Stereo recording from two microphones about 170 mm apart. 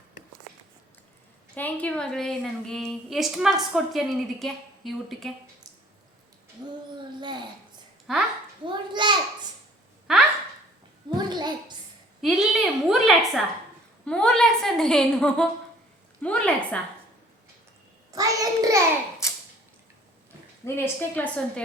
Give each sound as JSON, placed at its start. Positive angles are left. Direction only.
{"t": 1.5, "sound": "a woman's voice", "side_deg": 10}
{"t": 7.2, "sound": "a child's voice", "side_deg": -25}
{"t": 8.1, "sound": "a woman's voice", "side_deg": 0}
{"t": 8.6, "sound": "a child's voice", "side_deg": -25}
{"t": 11.2, "sound": "a child's voice", "side_deg": -25}
{"t": 12.2, "sound": "a woman's voice", "side_deg": 0}
{"t": 18.1, "sound": "a child's voice", "side_deg": -20}
{"t": 20.7, "sound": "a woman's voice", "side_deg": 15}